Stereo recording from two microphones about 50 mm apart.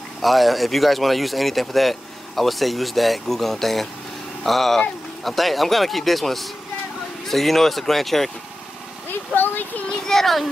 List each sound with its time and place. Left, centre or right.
0.2 s speech: centre
9.3 s a sound: left
10.0 s speech: centre